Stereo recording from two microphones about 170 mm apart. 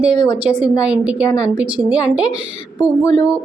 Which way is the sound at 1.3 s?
20° left (ahead or behind).